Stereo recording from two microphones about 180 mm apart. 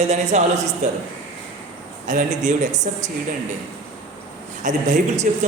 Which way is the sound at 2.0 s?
45° right (ahead or behind).